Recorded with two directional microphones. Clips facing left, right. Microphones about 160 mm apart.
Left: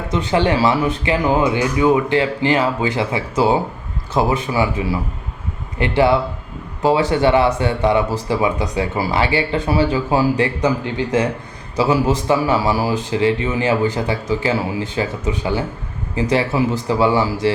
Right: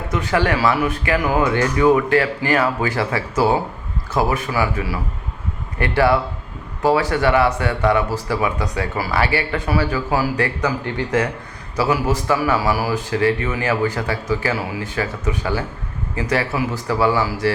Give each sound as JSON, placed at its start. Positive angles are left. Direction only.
{"t": 0.1, "sound": "speech", "side_deg": 25}